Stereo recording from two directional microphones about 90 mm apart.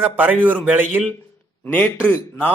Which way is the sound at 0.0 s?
20° right (ahead or behind).